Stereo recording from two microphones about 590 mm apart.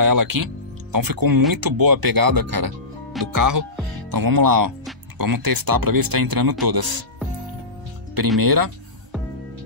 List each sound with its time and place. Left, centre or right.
0.0 s speech: right
8.4 s speech: right